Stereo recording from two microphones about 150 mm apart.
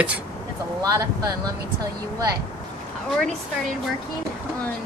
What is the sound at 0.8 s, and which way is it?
Speech, 25° right (ahead or behind).